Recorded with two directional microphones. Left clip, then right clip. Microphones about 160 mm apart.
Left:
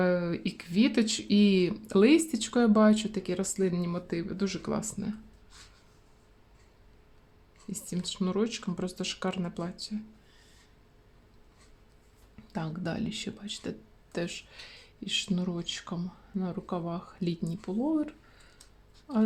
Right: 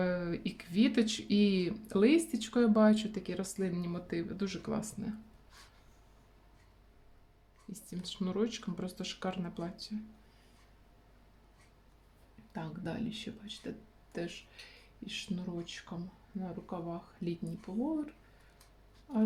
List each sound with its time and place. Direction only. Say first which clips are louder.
0.0 s speech: left 7 dB; 40° left (ahead or behind)
7.7 s speech: left 7 dB; 35° left (ahead or behind)
12.5 s speech: left 6 dB; 65° left (ahead or behind)